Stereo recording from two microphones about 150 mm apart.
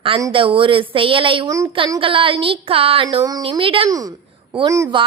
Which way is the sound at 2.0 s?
35° right (ahead or behind).